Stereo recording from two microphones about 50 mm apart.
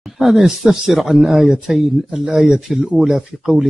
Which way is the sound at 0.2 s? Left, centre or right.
Centre.